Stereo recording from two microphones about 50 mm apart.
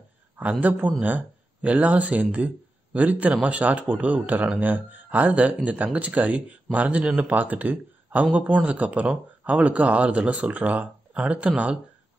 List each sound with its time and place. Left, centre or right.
0.4 s speech: right